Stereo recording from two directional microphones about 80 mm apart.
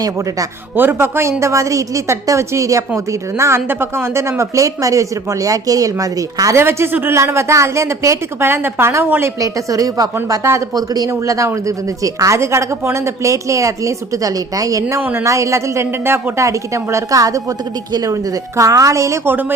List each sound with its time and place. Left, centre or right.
0.8 s a woman's voice: right
6.6 s a woman's voice: right
9.4 s a woman's voice: right
11.1 s a woman's voice: right
16.5 s a woman's voice: right
19.2 s a woman's voice: right